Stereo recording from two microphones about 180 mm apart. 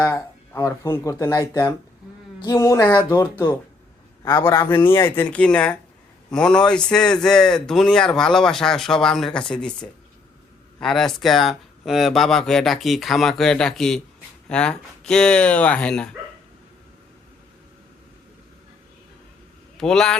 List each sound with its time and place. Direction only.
0.0 s speech: 15° left (ahead or behind)
10.8 s speech: 5° left (ahead or behind)
19.7 s a man's voice: 5° left (ahead or behind)